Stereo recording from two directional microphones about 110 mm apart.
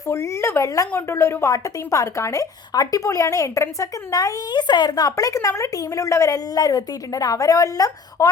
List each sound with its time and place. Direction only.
0.1 s a woman's voice: 25° left (ahead or behind)